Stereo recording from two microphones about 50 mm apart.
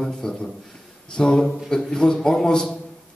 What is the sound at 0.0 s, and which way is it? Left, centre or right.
A man's voice, centre.